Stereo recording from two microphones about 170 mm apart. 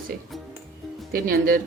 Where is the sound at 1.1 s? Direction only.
60° right (ahead or behind).